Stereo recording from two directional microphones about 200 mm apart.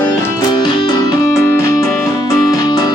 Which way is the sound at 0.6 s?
20° left (ahead or behind).